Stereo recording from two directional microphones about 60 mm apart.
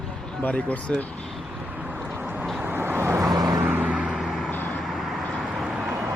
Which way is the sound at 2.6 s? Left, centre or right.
Right.